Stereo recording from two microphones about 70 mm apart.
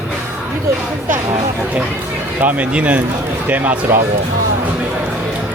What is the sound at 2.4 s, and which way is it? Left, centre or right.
Speech, right.